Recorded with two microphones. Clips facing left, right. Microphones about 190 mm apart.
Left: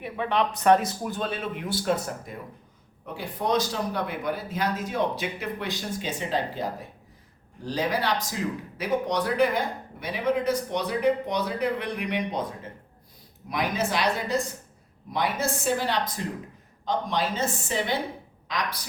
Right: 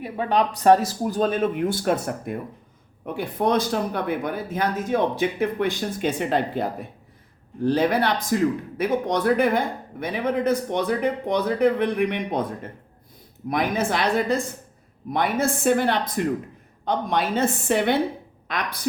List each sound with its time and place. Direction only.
0.0 s speech: 40° right (ahead or behind); by 18.8 s 55° right (ahead or behind)